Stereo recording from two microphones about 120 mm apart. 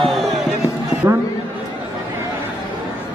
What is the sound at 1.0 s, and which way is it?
Speech, 30° right (ahead or behind).